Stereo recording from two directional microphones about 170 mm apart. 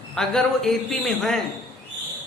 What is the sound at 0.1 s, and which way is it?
Speech, centre (ahead or behind).